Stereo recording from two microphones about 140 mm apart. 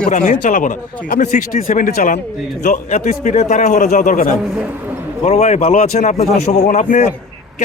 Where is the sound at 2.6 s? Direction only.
75° left (ahead or behind).